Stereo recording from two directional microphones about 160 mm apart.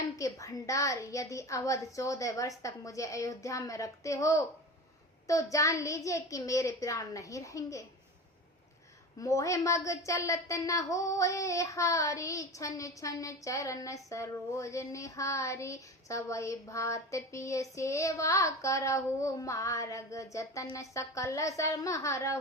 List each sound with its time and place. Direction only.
0.2 s a woman's voice: 20° left (ahead or behind)
9.2 s a woman's voice: 20° left (ahead or behind)